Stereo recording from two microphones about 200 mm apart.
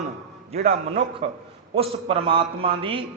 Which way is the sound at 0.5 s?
30° right (ahead or behind).